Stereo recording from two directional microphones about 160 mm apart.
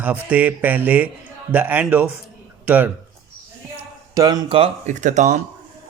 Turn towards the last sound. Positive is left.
turn(degrees=-50)  # may be behind; listen again after turning